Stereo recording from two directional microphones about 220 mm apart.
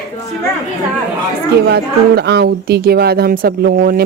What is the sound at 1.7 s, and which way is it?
Speech, 50° right (ahead or behind).